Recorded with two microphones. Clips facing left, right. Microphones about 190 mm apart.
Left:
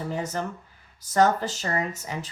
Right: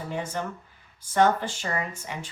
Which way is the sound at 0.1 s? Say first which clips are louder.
Right 2 dB; 40° left (ahead or behind).